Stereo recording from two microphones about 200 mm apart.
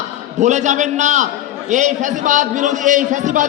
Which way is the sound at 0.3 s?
35° right (ahead or behind).